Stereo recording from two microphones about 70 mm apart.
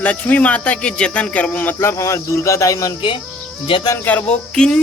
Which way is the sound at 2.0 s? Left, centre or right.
Left.